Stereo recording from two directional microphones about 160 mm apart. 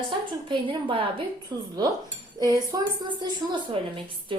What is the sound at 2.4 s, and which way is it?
A woman's voice, 20° right (ahead or behind).